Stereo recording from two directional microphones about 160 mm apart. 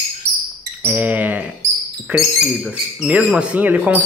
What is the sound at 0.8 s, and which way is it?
Speech, 10° right (ahead or behind).